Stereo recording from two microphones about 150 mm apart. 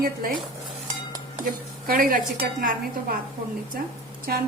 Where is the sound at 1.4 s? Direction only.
70° right (ahead or behind).